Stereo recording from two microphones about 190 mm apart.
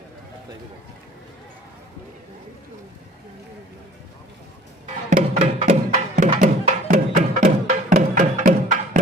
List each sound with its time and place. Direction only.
5.0 s music: 35° right (ahead or behind)